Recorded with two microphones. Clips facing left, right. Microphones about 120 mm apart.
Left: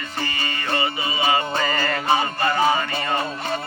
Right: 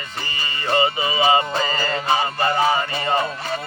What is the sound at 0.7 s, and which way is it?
Music, 25° right (ahead or behind).